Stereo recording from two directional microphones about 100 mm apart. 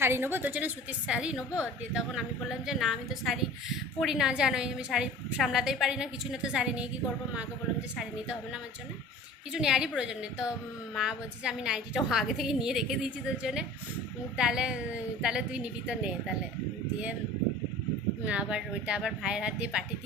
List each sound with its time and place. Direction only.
0.0 s a woman's voice: 25° right (ahead or behind)
9.5 s a woman's voice: 5° right (ahead or behind)
18.3 s a woman's voice: 10° right (ahead or behind)